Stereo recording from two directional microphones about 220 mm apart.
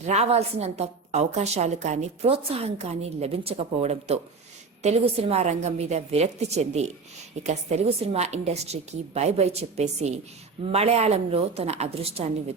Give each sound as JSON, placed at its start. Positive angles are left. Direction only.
{"t": 0.1, "sound": "a woman's voice", "side_deg": -30}